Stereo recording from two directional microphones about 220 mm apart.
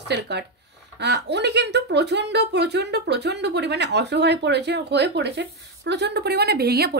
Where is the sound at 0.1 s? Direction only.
50° right (ahead or behind).